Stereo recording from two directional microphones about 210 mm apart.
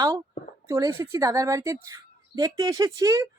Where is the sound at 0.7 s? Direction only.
15° right (ahead or behind).